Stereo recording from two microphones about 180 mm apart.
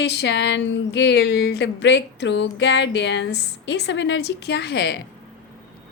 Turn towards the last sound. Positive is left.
turn(degrees=65)  # may be behind; listen again after turning